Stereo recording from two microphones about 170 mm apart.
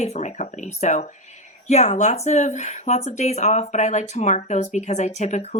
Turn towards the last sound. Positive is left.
turn(degrees=45)  # may be behind; listen again after turning